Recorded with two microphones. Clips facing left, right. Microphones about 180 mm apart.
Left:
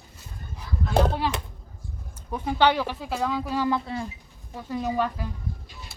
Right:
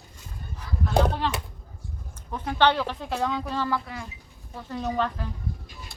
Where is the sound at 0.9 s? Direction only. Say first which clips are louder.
Left 1 dB; 5° left (ahead or behind).